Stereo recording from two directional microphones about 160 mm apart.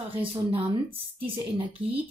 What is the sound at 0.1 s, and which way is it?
Speech, 35° right (ahead or behind).